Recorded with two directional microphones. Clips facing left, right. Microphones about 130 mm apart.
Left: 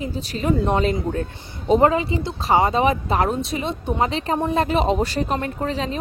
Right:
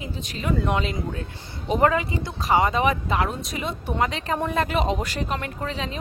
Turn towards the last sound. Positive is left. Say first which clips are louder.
# left 5 dB
turn(degrees=35)  # may be behind; listen again after turning